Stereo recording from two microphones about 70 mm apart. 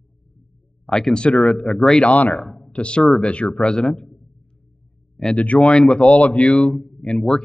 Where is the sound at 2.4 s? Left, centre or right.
Centre.